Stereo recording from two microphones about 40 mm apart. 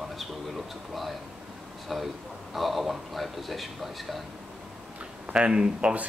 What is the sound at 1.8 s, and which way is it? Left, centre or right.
Speech, centre.